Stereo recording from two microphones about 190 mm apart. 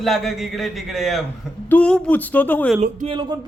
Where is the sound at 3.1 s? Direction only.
25° right (ahead or behind).